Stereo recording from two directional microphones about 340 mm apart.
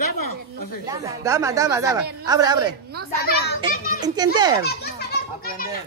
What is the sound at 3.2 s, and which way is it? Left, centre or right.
Speech, left.